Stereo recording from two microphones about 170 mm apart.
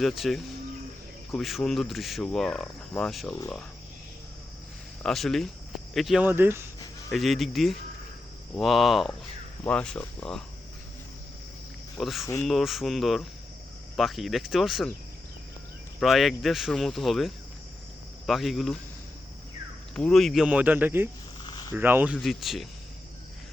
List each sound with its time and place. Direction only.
0.0 s speech: centre (ahead or behind)
5.0 s speech: centre (ahead or behind); by 6.7 s 15° right (ahead or behind)
7.1 s speech: centre (ahead or behind)
11.9 s speech: centre (ahead or behind)
16.0 s speech: centre (ahead or behind)
20.0 s speech: 5° left (ahead or behind)
21.4 s a sound: 25° left (ahead or behind)
21.8 s speech: 10° right (ahead or behind)